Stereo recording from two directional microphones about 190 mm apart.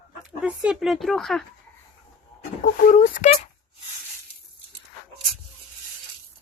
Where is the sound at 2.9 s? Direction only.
40° left (ahead or behind).